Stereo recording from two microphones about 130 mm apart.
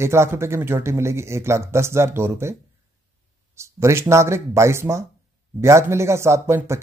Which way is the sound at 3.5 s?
20° right (ahead or behind).